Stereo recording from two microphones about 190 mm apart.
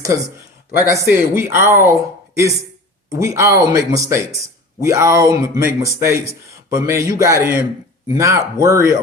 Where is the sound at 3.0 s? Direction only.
15° right (ahead or behind).